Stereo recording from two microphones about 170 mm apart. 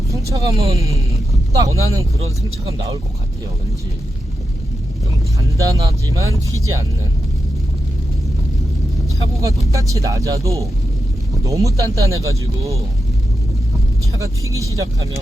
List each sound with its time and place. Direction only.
0.1 s vehicle: 20° right (ahead or behind)
0.8 s speech: 20° right (ahead or behind)
2.1 s speech: 35° right (ahead or behind)
5.5 s speech: 20° right (ahead or behind)
9.1 s speech: 20° right (ahead or behind)
14.1 s speech: 20° right (ahead or behind)